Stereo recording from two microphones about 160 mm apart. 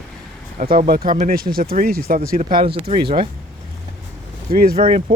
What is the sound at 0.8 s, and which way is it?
Speech, 60° right (ahead or behind).